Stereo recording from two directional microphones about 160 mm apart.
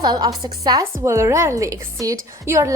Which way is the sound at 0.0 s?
25° right (ahead or behind).